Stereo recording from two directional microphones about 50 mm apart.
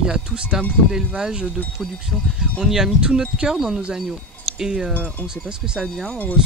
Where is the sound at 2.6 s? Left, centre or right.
Centre.